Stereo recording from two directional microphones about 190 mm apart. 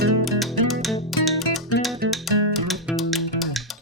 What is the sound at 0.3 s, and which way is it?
Music, centre (ahead or behind).